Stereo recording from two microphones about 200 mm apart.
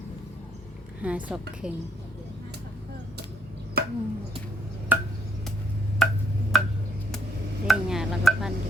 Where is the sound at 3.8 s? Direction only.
50° right (ahead or behind).